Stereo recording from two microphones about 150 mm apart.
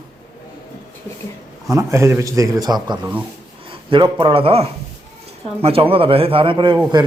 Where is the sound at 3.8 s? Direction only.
35° right (ahead or behind).